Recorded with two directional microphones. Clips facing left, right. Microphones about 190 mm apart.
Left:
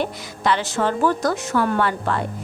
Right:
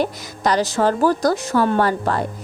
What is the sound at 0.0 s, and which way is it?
Speech, 40° right (ahead or behind).